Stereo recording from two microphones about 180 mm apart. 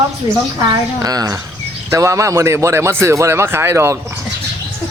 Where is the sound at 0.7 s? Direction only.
20° right (ahead or behind).